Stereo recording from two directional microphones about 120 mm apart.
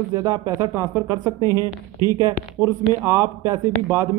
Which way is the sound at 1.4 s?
30° left (ahead or behind).